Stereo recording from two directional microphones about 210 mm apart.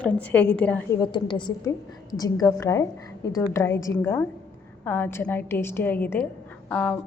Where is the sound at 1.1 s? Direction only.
20° left (ahead or behind).